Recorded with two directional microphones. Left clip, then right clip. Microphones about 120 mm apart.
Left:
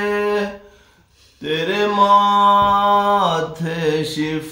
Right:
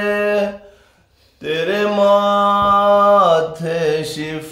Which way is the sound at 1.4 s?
40° right (ahead or behind).